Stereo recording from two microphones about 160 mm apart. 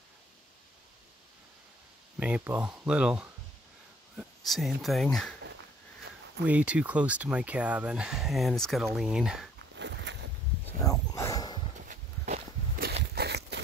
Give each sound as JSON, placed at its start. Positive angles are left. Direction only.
{"t": 2.1, "sound": "speech", "side_deg": -10}
{"t": 6.4, "sound": "speech", "side_deg": -10}
{"t": 9.8, "sound": "walk", "side_deg": -90}
{"t": 10.8, "sound": "a sound", "side_deg": 20}
{"t": 11.9, "sound": "walk", "side_deg": -60}
{"t": 13.1, "sound": "a sound", "side_deg": -90}